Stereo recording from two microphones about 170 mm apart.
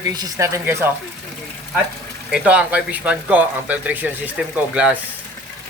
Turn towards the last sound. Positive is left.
turn(degrees=-5)  # may be behind; listen again after turning